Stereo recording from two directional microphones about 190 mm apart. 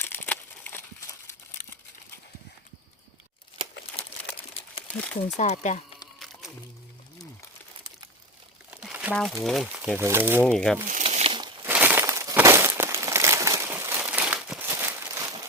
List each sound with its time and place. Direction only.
0.0 s crumpling: 10° left (ahead or behind)
4.9 s speech: 5° left (ahead or behind)
5.4 s speech: 35° left (ahead or behind)
6.1 s music: centre (ahead or behind)
8.7 s crumpling: 5° right (ahead or behind)
9.1 s speech: centre (ahead or behind)
10.0 s speech: 10° right (ahead or behind)
10.4 s speech: 5° left (ahead or behind)
10.8 s crumpling: 40° right (ahead or behind)
11.6 s crumpling: 10° right (ahead or behind)